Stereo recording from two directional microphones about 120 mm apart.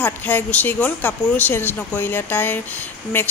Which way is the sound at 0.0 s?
15° left (ahead or behind).